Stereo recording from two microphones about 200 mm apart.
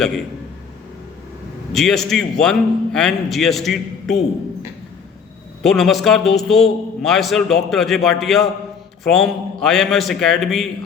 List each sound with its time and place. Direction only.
1.7 s a man's voice: centre (ahead or behind)
5.6 s a man's voice: centre (ahead or behind)